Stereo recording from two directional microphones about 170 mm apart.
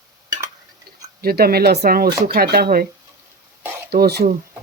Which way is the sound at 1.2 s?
65° right (ahead or behind).